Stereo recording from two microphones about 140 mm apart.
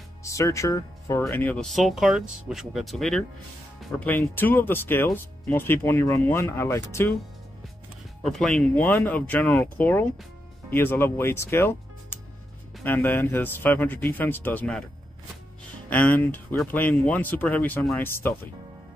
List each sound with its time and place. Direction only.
0.2 s speech: 20° left (ahead or behind)
1.3 s speech: 10° left (ahead or behind)
1.7 s speech: centre (ahead or behind)
4.0 s speech: 15° left (ahead or behind)
8.2 s speech: centre (ahead or behind)
15.9 s speech: 10° left (ahead or behind)